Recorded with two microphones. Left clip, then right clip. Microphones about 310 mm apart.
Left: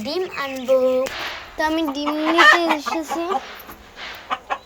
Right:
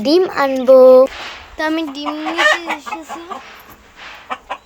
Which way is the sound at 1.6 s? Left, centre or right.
Centre.